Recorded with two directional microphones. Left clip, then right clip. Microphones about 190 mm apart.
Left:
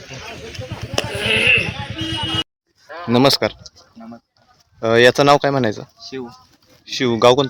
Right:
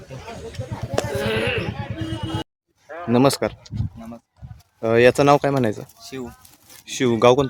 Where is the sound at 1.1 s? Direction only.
45° right (ahead or behind).